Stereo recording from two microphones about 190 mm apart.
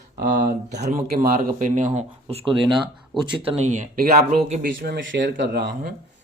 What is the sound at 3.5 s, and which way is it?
Speech, 35° right (ahead or behind).